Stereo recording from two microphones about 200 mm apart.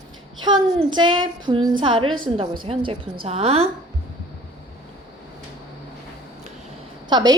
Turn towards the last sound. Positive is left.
turn(degrees=-20)  # may be behind; listen again after turning